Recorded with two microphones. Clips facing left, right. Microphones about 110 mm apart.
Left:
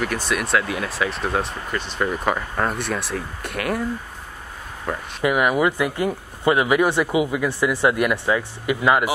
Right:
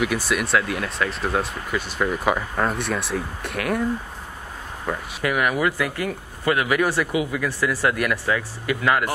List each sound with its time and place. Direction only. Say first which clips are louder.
0.0 s speech: right 1 dB; 5° right (ahead or behind)
4.9 s speech: even; centre (ahead or behind)
5.2 s speech: left 3 dB; 20° left (ahead or behind)